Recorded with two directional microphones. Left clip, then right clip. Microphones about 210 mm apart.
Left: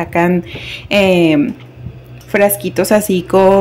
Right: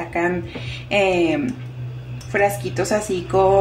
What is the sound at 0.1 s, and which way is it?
A woman's voice, 45° left (ahead or behind).